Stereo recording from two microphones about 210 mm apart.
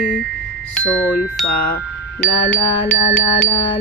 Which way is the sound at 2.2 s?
5° left (ahead or behind).